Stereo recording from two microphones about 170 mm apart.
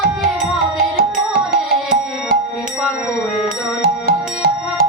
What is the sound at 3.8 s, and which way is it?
Music, 60° right (ahead or behind).